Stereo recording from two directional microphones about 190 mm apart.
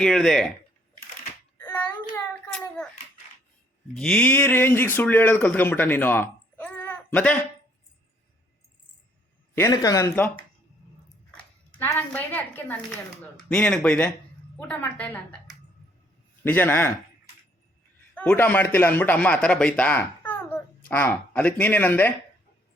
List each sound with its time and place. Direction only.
0.0 s speech: 5° left (ahead or behind)
1.5 s a sound: 10° left (ahead or behind)
3.9 s speech: 5° left (ahead or behind)
9.6 s speech: 20° left (ahead or behind)
18.1 s speech: 5° left (ahead or behind)